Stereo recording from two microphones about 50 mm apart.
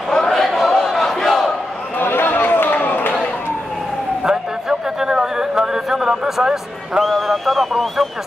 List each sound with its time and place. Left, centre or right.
0.1 s crowd: centre
2.0 s chatter: left
4.2 s a sound: centre
7.0 s speech: centre